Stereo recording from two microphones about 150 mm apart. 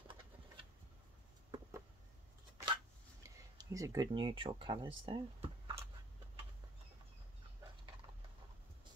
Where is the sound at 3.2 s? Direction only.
20° right (ahead or behind).